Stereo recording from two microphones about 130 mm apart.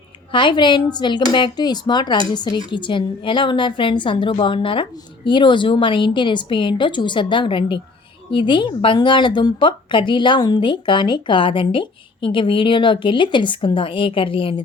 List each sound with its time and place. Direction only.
0.3 s speech: 40° left (ahead or behind)